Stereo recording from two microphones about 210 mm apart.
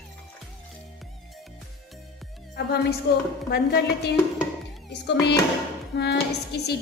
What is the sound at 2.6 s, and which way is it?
A woman's voice, 50° left (ahead or behind).